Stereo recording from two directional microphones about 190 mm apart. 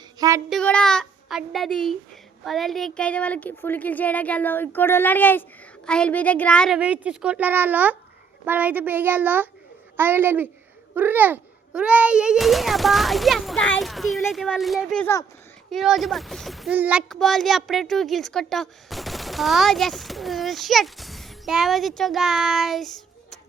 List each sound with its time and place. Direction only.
0.2 s child singing: 15° right (ahead or behind)
0.5 s a child's voice: 5° left (ahead or behind)
6.7 s a woman's voice: 5° right (ahead or behind)